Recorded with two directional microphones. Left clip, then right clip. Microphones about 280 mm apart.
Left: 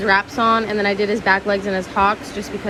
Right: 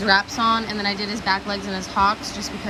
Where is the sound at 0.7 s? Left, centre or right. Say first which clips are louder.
Left 6 dB; centre.